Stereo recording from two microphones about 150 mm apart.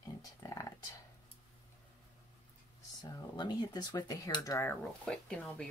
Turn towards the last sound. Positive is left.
turn(degrees=5)  # may be behind; listen again after turning